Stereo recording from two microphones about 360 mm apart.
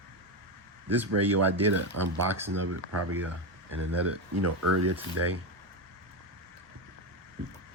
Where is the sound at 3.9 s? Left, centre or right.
Right.